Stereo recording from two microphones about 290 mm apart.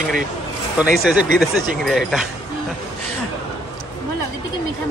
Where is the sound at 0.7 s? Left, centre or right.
Centre.